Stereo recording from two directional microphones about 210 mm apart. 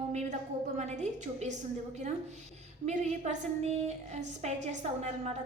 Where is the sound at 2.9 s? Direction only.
35° right (ahead or behind).